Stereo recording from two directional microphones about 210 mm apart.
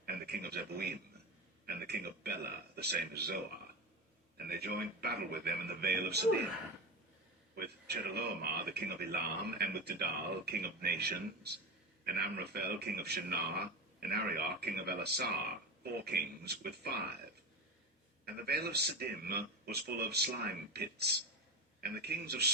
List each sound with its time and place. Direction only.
0.0 s a man's voice: 50° right (ahead or behind)
4.4 s a man's voice: 50° right (ahead or behind)
7.5 s a man's voice: 50° right (ahead or behind)
18.3 s a man's voice: 50° right (ahead or behind)